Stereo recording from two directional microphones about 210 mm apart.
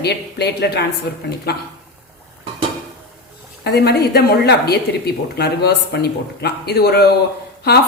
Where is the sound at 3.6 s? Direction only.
50° left (ahead or behind).